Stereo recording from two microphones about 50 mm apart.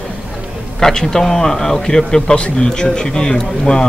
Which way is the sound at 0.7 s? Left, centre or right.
Centre.